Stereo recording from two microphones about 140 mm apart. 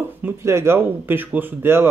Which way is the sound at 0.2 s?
15° right (ahead or behind).